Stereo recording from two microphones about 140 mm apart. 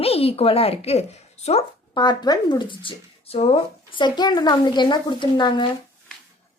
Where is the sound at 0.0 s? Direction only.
45° left (ahead or behind).